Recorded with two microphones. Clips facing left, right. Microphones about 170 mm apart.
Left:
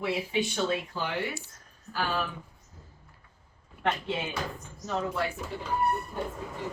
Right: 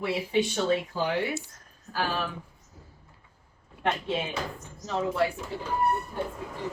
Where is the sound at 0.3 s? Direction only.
35° right (ahead or behind).